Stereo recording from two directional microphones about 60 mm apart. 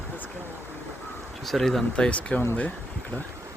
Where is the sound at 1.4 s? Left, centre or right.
Centre.